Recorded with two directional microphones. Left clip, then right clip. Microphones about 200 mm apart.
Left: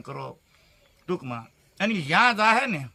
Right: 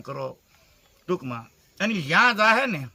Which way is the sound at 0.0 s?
15° left (ahead or behind).